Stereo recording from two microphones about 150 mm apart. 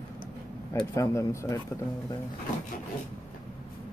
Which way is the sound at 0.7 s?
20° left (ahead or behind).